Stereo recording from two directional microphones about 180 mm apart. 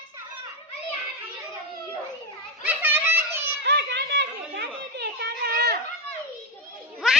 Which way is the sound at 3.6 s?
75° right (ahead or behind).